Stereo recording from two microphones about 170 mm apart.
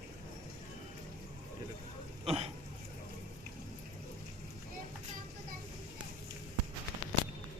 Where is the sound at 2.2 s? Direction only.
35° right (ahead or behind).